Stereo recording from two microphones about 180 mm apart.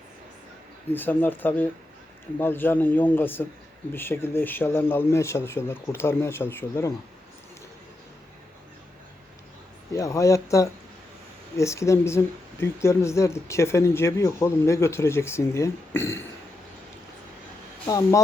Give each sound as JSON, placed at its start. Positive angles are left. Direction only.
{"t": 0.9, "sound": "speech", "side_deg": 10}
{"t": 9.9, "sound": "speech", "side_deg": 15}
{"t": 17.8, "sound": "speech", "side_deg": 20}